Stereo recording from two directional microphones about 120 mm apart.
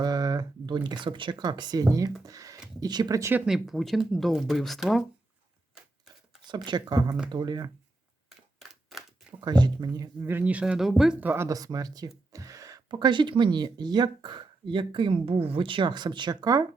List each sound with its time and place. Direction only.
0.0 s speech: 35° right (ahead or behind)
3.3 s speech: 5° right (ahead or behind)
6.7 s speech: 35° right (ahead or behind)
8.3 s a sound: centre (ahead or behind)
9.4 s speech: 35° right (ahead or behind)
10.2 s speech: 15° right (ahead or behind)
11.2 s speech: 15° right (ahead or behind)
11.4 s speech: 30° right (ahead or behind)